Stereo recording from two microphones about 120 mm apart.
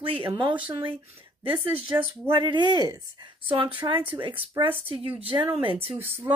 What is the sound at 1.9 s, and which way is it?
Speech, 25° right (ahead or behind).